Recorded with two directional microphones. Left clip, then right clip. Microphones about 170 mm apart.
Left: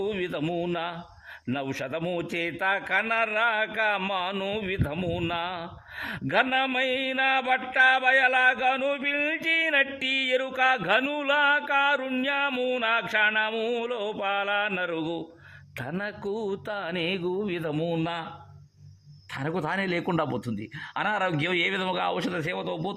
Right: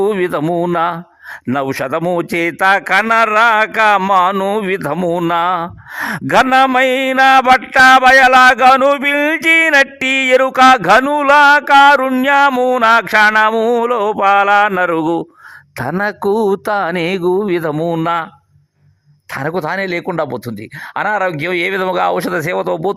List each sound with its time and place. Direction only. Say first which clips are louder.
0.0 s a man's voice: right 15 dB; 50° right (ahead or behind)
15.8 s a man's voice: right 16 dB; 45° right (ahead or behind)
19.3 s a man's voice: right 11 dB; 35° right (ahead or behind); by 23.0 s 50° right (ahead or behind)